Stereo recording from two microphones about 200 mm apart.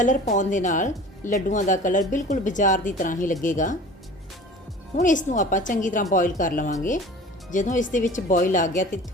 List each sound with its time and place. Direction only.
0.0 s a woman's voice: 40° left (ahead or behind)
4.9 s a woman's voice: 40° left (ahead or behind)